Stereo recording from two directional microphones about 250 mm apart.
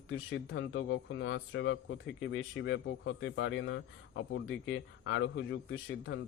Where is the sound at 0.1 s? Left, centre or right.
Left.